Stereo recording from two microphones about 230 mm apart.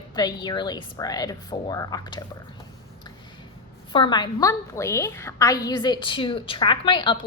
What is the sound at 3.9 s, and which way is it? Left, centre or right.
A woman's voice, centre.